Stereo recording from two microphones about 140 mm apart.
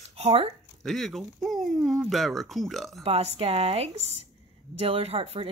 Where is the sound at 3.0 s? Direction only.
45° right (ahead or behind).